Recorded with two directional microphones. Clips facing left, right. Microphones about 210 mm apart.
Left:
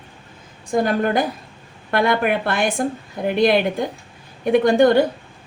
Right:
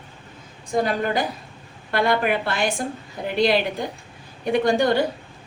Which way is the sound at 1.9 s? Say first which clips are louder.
Left 2 dB; 55° left (ahead or behind).